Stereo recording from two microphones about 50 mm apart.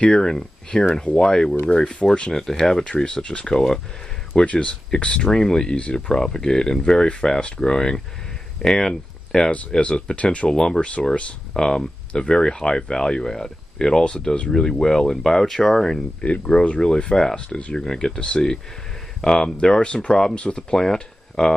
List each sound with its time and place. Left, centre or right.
0.0 s speech: centre
2.3 s speech: centre
16.3 s speech: left